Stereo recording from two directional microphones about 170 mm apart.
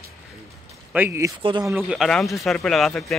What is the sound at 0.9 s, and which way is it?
Speech, 15° right (ahead or behind).